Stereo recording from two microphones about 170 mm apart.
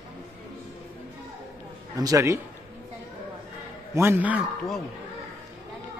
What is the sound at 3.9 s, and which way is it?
Speech, 15° right (ahead or behind).